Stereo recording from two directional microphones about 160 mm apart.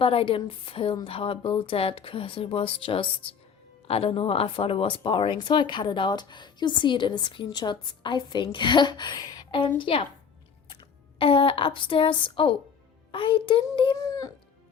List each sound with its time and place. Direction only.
0.0 s speech: 35° left (ahead or behind)
11.2 s a child's voice: 35° left (ahead or behind)